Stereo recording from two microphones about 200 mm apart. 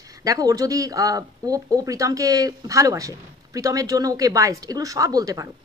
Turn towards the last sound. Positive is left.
turn(degrees=-15)  # may be behind; listen again after turning